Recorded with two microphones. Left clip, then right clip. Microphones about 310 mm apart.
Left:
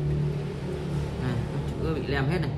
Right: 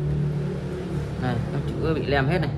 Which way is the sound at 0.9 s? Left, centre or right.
Centre.